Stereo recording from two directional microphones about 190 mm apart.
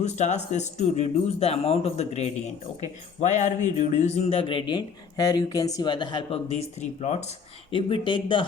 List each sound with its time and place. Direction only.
0.0 s speech: 35° left (ahead or behind)